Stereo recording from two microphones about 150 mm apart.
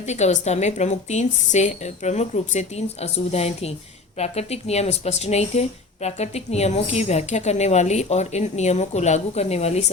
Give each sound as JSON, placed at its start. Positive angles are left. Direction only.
{"t": 0.0, "sound": "speech", "side_deg": 50}